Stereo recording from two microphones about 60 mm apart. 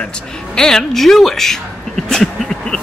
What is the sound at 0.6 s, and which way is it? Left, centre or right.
Speech, centre.